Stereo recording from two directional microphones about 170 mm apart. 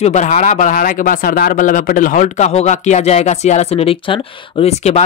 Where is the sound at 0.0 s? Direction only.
45° left (ahead or behind).